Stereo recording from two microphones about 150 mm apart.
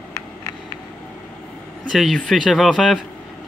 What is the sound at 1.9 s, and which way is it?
Speech, centre (ahead or behind).